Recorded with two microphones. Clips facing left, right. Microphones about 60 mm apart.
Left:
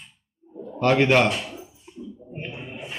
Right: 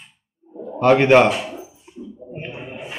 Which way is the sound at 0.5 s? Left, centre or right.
Right.